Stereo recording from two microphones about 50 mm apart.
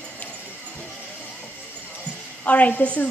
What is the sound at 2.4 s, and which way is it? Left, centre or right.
Speech, left.